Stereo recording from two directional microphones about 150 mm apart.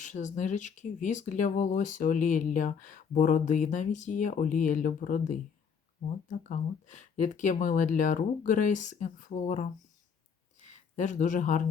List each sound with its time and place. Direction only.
0.0 s speech: 55° left (ahead or behind)
10.7 s speech: 55° left (ahead or behind)